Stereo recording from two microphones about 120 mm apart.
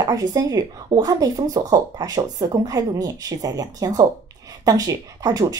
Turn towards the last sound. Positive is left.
turn(degrees=-30)  # may be behind; listen again after turning